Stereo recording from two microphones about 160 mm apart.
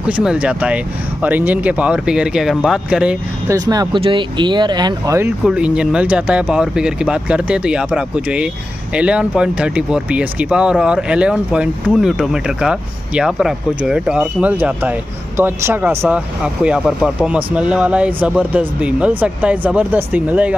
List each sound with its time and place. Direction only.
0.0 s speech: 5° right (ahead or behind)
3.4 s speech: 20° right (ahead or behind)
5.4 s speech: 5° right (ahead or behind)